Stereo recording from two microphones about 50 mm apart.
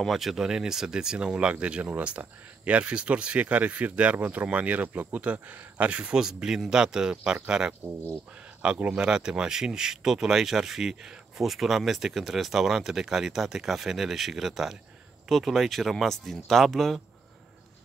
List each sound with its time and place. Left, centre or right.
0.1 s speech: centre; by 5.9 s right
5.9 s speech: right
7.8 s speech: right
8.6 s speech: centre